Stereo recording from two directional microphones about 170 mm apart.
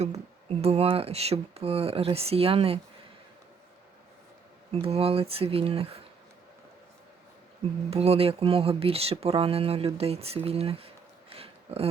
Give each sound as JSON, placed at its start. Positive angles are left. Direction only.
{"t": 0.6, "sound": "speech", "side_deg": -35}
{"t": 4.7, "sound": "speech", "side_deg": -35}
{"t": 7.9, "sound": "speech", "side_deg": -35}